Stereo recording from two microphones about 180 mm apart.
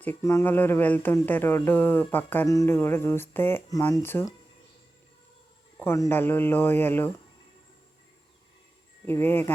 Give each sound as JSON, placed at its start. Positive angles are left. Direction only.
{"t": 0.2, "sound": "speech", "side_deg": 15}
{"t": 5.8, "sound": "speech", "side_deg": 15}
{"t": 9.0, "sound": "speech", "side_deg": 10}